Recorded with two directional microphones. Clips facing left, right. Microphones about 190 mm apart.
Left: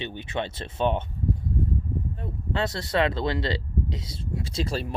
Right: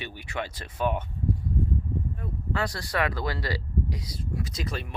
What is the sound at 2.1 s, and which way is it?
Speech, 25° left (ahead or behind).